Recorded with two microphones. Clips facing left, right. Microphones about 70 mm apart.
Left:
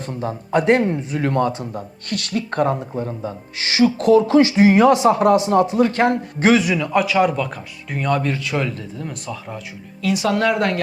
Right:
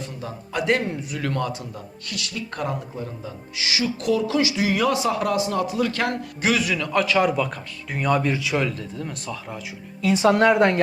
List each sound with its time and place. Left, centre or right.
0.0 s speech: left
6.7 s speech: centre
10.0 s speech: right